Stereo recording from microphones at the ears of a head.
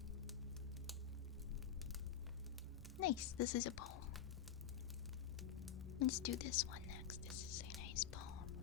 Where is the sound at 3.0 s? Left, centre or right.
Left.